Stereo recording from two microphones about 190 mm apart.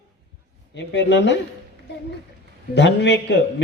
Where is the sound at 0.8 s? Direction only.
65° left (ahead or behind).